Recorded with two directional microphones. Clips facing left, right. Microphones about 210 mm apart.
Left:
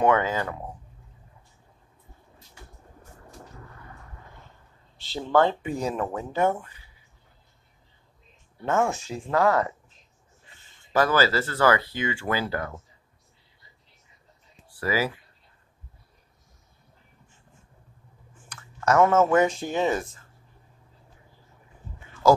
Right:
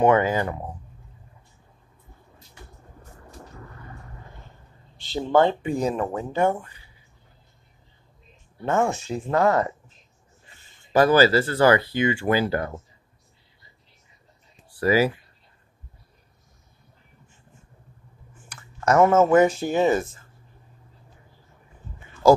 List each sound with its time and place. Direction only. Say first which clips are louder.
0.2 s speech: right 4 dB; 15° right (ahead or behind)
4.9 s a sound: right 5 dB; 5° left (ahead or behind)
5.2 s speech: right 2 dB; 20° right (ahead or behind)
5.8 s speech: right 3 dB; centre (ahead or behind)
8.6 s speech: right 2 dB; centre (ahead or behind)
9.2 s speech: right 1 dB; 25° right (ahead or behind)
10.9 s speech: right 5 dB; 15° right (ahead or behind)
11.3 s speech: right 6 dB; 30° right (ahead or behind)
11.9 s speech: right 6 dB; 15° right (ahead or behind)
14.8 s speech: right 6 dB; 20° right (ahead or behind)
18.5 s a sound: right 2 dB; 10° right (ahead or behind)
19.3 s speech: right 4 dB; 5° right (ahead or behind)